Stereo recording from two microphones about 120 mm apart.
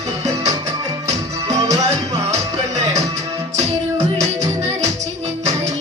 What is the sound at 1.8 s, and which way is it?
Music, 65° right (ahead or behind).